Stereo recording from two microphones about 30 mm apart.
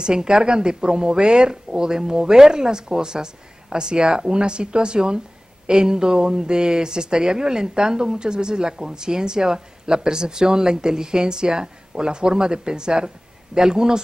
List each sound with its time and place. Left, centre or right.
0.0 s speech: right